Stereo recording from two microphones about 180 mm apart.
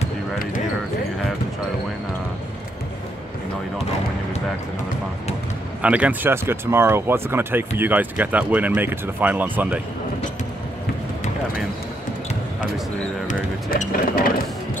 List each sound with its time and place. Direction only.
5.8 s speech: 5° right (ahead or behind)
13.3 s mechanisms: 50° left (ahead or behind)